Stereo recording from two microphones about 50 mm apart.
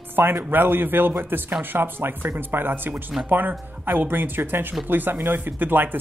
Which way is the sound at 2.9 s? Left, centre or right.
Centre.